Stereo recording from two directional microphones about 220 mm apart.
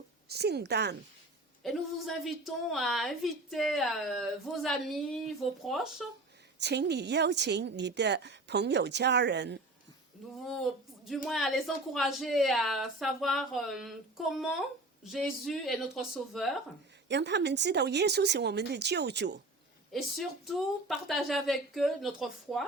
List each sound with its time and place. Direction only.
0.3 s a woman's voice: 45° right (ahead or behind)
1.6 s a woman's voice: centre (ahead or behind)
6.6 s a woman's voice: 50° right (ahead or behind)
10.4 s a woman's voice: centre (ahead or behind)
17.1 s a woman's voice: 50° right (ahead or behind)
19.9 s a woman's voice: centre (ahead or behind)